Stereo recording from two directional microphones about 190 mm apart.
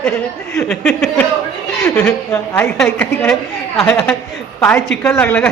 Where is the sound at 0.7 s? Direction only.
Centre (ahead or behind).